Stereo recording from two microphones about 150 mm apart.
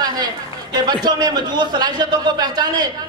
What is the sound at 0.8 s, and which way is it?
A man's voice, 30° right (ahead or behind).